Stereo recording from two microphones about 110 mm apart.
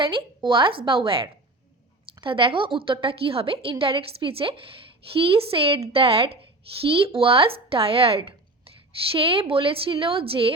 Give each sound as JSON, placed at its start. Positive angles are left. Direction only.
{"t": 0.0, "sound": "a woman's voice", "side_deg": -50}